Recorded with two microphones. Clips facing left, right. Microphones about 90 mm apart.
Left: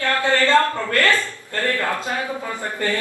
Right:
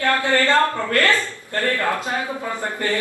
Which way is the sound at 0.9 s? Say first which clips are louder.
Left 1 dB; 20° right (ahead or behind).